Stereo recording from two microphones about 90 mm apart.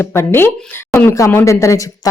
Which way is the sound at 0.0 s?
25° left (ahead or behind).